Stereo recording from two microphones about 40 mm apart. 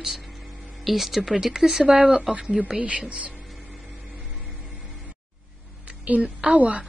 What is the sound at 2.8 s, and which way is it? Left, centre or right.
Speech, right.